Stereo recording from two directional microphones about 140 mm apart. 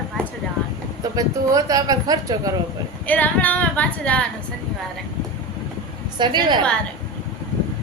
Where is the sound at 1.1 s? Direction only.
25° right (ahead or behind).